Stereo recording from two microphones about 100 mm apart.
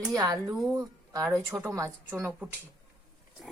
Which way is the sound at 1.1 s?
30° right (ahead or behind).